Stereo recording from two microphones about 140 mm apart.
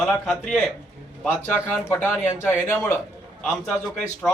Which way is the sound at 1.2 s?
15° left (ahead or behind).